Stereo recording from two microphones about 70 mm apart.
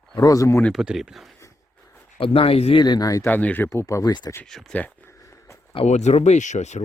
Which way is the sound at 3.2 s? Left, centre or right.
Left.